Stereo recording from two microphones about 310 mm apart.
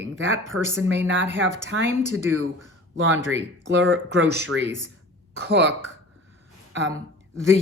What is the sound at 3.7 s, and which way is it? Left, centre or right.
Speech, right.